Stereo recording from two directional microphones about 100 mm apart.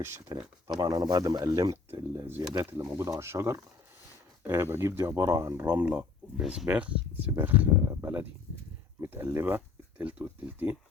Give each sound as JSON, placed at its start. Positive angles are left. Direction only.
{"t": 0.3, "sound": "speech", "side_deg": -45}
{"t": 1.5, "sound": "speech", "side_deg": -30}
{"t": 2.5, "sound": "speech", "side_deg": -35}
{"t": 5.6, "sound": "speech", "side_deg": -15}